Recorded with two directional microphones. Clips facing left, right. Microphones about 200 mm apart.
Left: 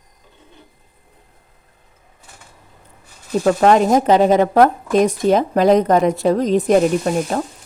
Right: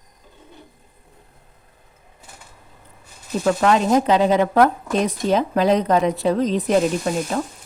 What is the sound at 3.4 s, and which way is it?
Speech, 45° left (ahead or behind).